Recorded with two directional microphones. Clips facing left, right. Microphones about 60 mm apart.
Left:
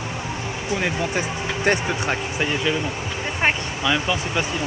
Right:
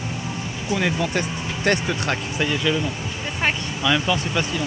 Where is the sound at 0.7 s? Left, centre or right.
Left.